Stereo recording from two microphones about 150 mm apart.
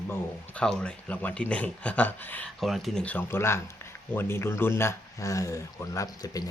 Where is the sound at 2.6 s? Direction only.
Centre (ahead or behind).